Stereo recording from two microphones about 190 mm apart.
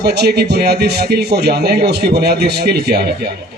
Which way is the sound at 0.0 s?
60° right (ahead or behind).